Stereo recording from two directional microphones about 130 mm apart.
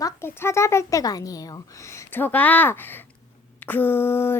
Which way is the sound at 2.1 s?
15° left (ahead or behind).